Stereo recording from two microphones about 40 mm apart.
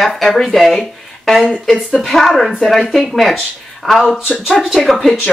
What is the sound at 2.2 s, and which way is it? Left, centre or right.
Speech, centre.